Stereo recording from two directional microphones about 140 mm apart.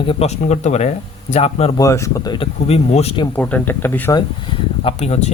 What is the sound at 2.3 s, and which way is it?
Speech, 45° left (ahead or behind).